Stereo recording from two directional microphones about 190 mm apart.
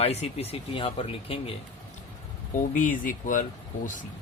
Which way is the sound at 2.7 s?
45° left (ahead or behind).